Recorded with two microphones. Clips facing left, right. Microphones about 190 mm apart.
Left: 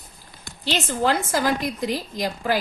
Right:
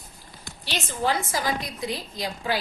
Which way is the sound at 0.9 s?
90° left.